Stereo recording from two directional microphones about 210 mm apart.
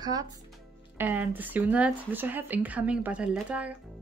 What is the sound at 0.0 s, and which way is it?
Speech, 15° right (ahead or behind).